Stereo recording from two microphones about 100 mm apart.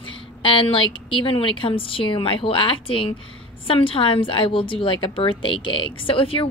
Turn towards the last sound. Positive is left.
turn(degrees=65)  # may be behind; listen again after turning